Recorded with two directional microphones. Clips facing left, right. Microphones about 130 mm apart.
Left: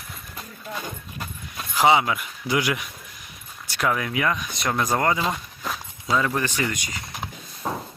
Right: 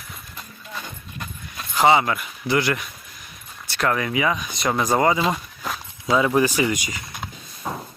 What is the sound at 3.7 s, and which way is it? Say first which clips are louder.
Speech: right 2 dB; 5° left (ahead or behind).